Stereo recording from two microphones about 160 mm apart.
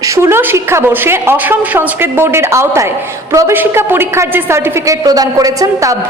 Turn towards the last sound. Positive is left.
turn(degrees=-20)  # may be behind; listen again after turning